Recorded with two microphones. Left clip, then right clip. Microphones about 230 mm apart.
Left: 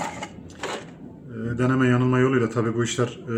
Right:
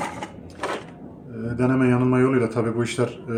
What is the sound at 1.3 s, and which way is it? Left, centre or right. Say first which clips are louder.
A man's voice: right 1 dB; centre.